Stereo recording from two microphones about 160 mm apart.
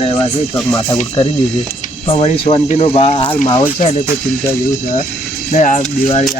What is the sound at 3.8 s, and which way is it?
Speech, 45° left (ahead or behind).